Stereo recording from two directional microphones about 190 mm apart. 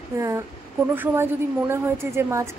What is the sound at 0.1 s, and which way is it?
A woman's voice, 15° right (ahead or behind).